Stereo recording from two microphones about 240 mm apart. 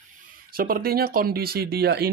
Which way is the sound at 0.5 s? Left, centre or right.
Right.